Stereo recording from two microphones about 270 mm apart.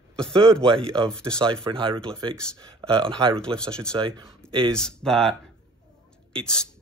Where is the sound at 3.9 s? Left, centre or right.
Centre.